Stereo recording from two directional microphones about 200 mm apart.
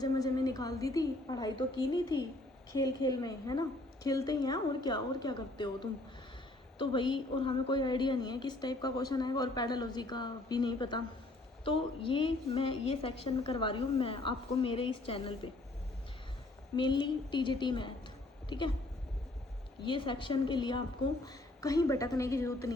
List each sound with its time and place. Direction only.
0.0 s a woman's voice: 20° left (ahead or behind)
16.7 s a woman's voice: 25° left (ahead or behind)
19.8 s a woman's voice: 25° left (ahead or behind)